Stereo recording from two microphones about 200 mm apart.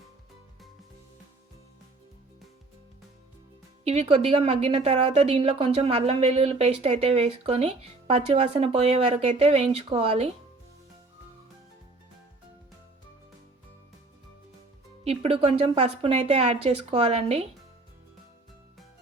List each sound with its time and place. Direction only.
3.8 s a woman's voice: 30° right (ahead or behind)
15.0 s a woman's voice: 30° right (ahead or behind)